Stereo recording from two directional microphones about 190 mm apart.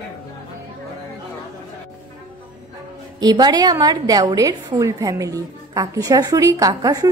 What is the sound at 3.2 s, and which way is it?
A woman's voice, 20° right (ahead or behind).